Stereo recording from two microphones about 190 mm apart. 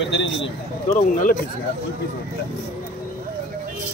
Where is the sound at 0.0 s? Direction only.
70° left (ahead or behind).